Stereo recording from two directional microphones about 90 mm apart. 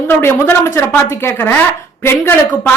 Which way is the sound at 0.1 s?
25° left (ahead or behind).